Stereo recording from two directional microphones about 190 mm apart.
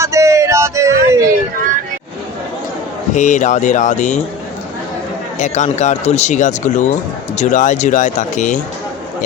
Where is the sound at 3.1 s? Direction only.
40° left (ahead or behind).